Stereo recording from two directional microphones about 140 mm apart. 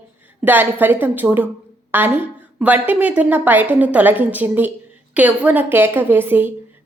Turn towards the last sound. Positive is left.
turn(degrees=-15)  # may be behind; listen again after turning